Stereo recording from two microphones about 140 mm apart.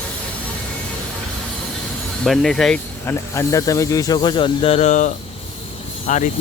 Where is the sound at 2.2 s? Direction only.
5° left (ahead or behind).